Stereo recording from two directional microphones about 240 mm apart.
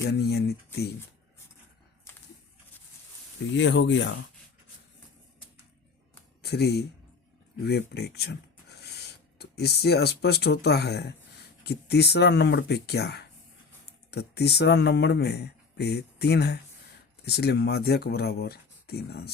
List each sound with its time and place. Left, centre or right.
0.0 s speech: left
2.1 s a sound: centre
3.5 s speech: left
6.4 s speech: left
9.4 s speech: left